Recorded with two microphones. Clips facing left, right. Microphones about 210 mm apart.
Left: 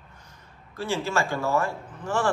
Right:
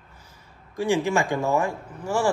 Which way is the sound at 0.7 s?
15° right (ahead or behind).